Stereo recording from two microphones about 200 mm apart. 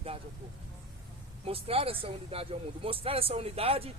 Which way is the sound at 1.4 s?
30° right (ahead or behind).